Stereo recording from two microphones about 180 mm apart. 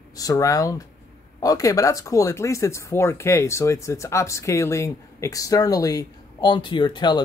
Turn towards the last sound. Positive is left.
turn(degrees=25)  # may be behind; listen again after turning